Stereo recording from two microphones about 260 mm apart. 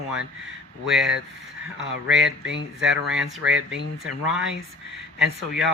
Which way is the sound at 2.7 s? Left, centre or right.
Centre.